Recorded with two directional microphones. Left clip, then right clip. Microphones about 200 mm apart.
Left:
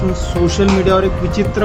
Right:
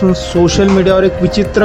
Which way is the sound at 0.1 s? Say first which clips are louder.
Right 6 dB; 25° right (ahead or behind).